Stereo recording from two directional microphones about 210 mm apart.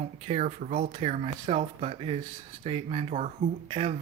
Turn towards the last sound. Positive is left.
turn(degrees=-30)  # may be behind; listen again after turning